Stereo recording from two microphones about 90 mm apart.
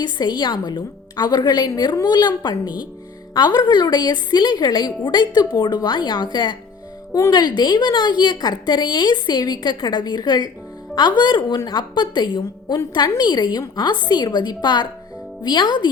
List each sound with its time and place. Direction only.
0.0 s a woman's voice: 50° left (ahead or behind)
7.1 s a woman's voice: 45° left (ahead or behind)